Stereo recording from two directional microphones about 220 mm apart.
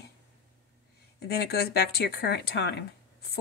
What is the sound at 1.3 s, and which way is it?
A woman's voice, 45° left (ahead or behind).